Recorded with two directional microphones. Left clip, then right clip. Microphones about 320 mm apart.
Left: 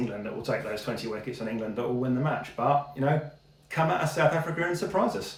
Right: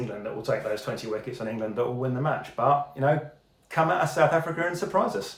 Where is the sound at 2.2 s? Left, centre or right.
Centre.